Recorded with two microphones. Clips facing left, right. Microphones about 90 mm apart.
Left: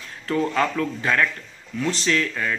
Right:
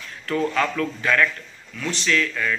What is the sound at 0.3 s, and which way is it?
A man's voice, 25° left (ahead or behind).